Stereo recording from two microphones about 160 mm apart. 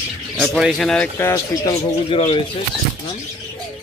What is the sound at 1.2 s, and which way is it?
Speech, 20° left (ahead or behind).